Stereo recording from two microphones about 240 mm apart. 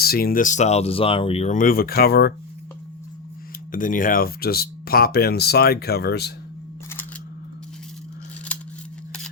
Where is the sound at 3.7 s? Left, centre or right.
Left.